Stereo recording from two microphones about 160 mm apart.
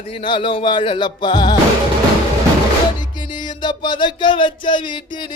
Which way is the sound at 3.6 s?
30° left (ahead or behind).